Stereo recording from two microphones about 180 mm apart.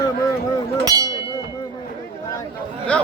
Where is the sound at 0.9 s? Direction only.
20° right (ahead or behind).